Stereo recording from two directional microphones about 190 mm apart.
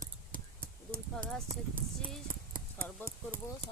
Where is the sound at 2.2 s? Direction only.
45° right (ahead or behind).